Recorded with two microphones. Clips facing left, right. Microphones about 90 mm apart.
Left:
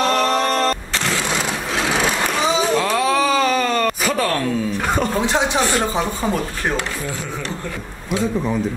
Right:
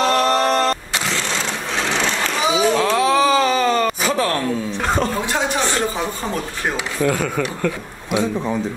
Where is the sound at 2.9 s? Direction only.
5° right (ahead or behind).